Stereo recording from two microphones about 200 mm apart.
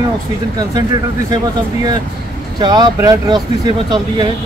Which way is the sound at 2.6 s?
20° right (ahead or behind).